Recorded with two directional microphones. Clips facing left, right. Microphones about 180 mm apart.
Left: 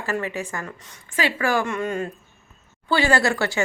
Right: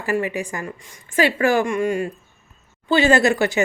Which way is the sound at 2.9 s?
20° right (ahead or behind).